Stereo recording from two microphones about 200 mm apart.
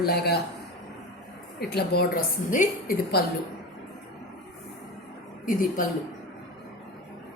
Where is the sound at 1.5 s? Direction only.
55° left (ahead or behind).